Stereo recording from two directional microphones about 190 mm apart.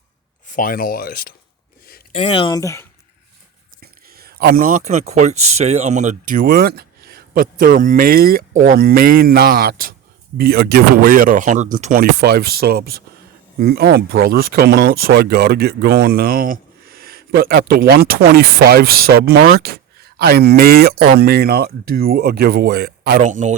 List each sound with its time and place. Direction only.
0.4 s speech: 45° left (ahead or behind)
2.1 s speech: 30° left (ahead or behind); by 2.8 s 15° left (ahead or behind)
3.8 s speech: 55° right (ahead or behind)
23.2 s speech: 40° right (ahead or behind)